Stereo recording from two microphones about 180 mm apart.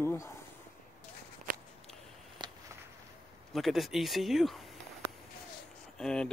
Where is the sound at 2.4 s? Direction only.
25° right (ahead or behind).